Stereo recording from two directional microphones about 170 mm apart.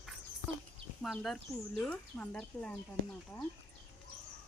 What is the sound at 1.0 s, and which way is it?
Speech, centre (ahead or behind).